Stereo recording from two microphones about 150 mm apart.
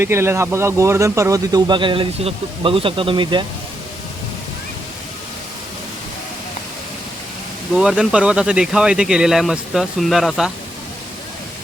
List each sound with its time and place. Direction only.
0.0 s speech: 15° right (ahead or behind); by 3.4 s 30° right (ahead or behind)
7.7 s speech: 5° right (ahead or behind)